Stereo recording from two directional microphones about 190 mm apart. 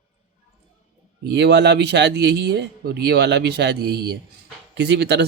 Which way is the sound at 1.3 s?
65° right (ahead or behind).